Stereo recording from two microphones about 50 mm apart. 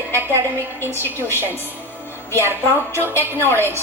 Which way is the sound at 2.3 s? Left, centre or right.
Right.